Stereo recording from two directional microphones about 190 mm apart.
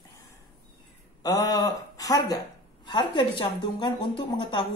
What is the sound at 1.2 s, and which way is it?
Speech, 20° left (ahead or behind).